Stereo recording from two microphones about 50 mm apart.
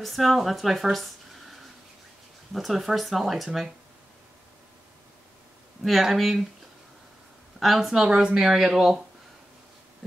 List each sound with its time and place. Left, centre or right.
0.0 s speech: centre
5.8 s speech: centre
7.8 s a woman's voice: centre